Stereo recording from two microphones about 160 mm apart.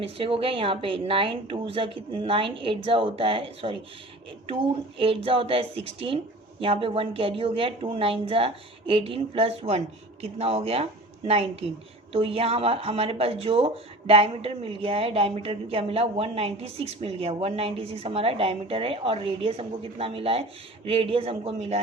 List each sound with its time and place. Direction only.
0.0 s speech: 35° right (ahead or behind)
4.9 s speech: 35° right (ahead or behind)